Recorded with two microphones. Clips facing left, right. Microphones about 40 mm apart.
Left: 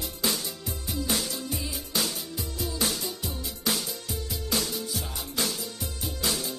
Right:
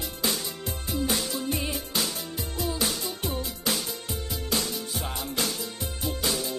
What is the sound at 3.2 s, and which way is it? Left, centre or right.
Music, right.